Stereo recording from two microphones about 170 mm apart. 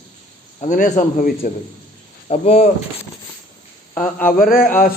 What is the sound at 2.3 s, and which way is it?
Speech, 40° left (ahead or behind).